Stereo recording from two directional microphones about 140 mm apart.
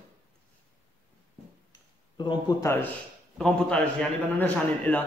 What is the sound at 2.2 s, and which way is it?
Speech, 30° left (ahead or behind).